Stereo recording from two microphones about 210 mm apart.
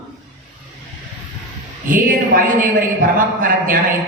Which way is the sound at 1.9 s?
40° right (ahead or behind).